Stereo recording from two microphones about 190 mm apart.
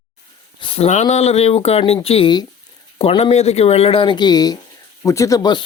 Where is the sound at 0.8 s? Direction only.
35° left (ahead or behind).